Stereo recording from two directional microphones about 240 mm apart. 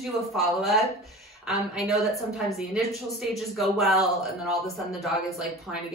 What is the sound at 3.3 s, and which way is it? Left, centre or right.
Speech, centre.